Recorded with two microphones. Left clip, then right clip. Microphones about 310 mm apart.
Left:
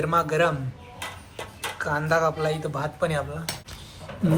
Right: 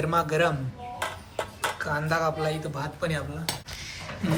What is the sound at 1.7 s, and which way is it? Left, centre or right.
Speech, centre.